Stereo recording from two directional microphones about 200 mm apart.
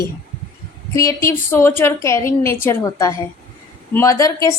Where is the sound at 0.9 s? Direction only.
15° left (ahead or behind).